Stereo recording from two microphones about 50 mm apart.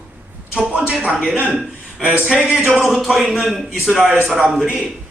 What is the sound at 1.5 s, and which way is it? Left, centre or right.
Speech, centre.